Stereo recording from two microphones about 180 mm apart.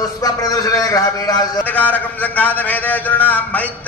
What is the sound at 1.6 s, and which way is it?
A man's voice, 10° left (ahead or behind).